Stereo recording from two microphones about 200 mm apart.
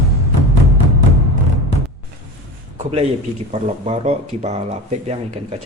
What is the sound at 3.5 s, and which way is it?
Speech, 35° right (ahead or behind).